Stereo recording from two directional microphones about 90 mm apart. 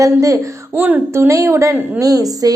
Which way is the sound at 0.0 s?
40° right (ahead or behind).